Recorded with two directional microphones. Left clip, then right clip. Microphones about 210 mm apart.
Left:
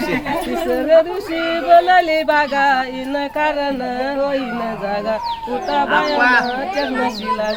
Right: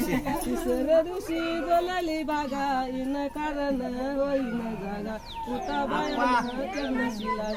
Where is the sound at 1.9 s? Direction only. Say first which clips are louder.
Left 16 dB; 15° right (ahead or behind).